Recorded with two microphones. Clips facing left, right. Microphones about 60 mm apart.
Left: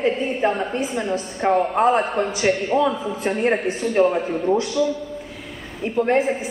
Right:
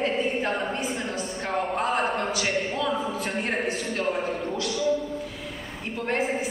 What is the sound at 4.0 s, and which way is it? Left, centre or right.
Speech, left.